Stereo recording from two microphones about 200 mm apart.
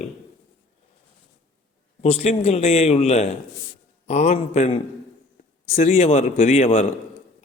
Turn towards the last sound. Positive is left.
turn(degrees=30)  # may be behind; listen again after turning